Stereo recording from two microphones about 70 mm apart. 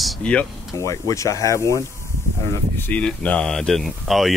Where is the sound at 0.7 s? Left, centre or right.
Left.